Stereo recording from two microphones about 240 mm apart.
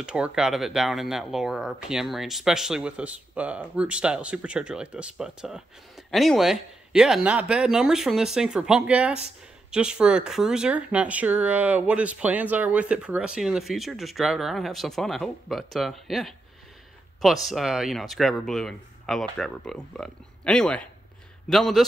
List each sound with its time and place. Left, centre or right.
0.0 s speech: centre